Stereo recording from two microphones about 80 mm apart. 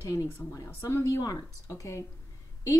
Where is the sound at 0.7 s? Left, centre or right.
Left.